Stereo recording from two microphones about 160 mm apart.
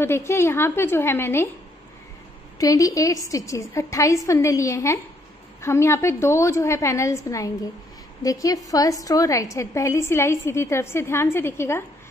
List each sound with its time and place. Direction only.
0.0 s a woman's voice: 15° left (ahead or behind)
2.6 s a woman's voice: 20° left (ahead or behind)